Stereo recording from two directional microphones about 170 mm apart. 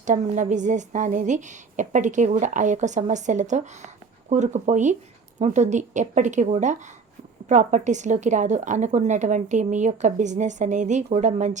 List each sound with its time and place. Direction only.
0.0 s a woman's voice: 45° right (ahead or behind)